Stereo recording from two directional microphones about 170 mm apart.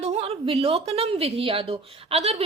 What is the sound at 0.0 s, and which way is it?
A woman's voice, 35° right (ahead or behind).